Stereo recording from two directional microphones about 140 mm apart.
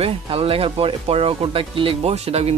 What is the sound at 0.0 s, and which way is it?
Speech, 45° right (ahead or behind).